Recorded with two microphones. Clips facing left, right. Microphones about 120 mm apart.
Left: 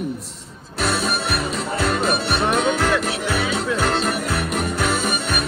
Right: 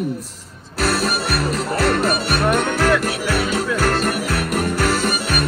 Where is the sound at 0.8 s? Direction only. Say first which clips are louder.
Right 2 dB; centre (ahead or behind).